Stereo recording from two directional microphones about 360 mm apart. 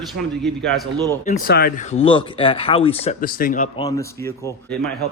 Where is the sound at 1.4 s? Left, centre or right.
Left.